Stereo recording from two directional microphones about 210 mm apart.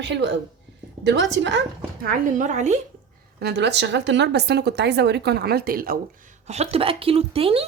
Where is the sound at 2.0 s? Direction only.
35° right (ahead or behind).